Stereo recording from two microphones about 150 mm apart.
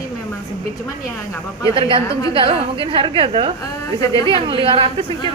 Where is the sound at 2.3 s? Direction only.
35° right (ahead or behind).